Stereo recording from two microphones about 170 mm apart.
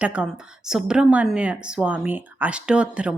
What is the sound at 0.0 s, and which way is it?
A woman's voice, 5° right (ahead or behind).